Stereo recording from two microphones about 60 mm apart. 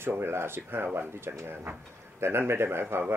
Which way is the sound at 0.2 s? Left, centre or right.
Right.